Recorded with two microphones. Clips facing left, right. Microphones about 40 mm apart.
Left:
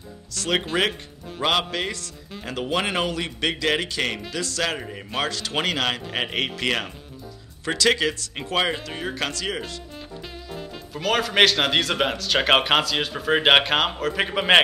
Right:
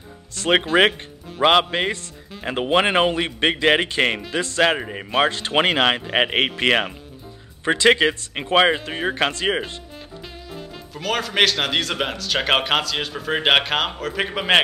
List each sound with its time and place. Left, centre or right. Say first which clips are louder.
0.3 s a man's voice: right 6 dB; right
10.5 s speech: left 2 dB; centre